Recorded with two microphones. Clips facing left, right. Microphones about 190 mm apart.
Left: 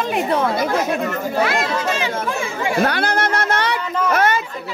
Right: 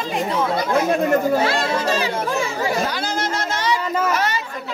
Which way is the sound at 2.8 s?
60° left (ahead or behind).